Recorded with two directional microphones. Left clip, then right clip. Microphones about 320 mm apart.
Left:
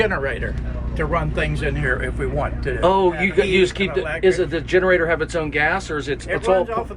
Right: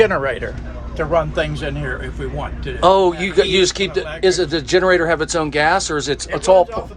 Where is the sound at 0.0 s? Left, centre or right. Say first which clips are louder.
Right 5 dB; right.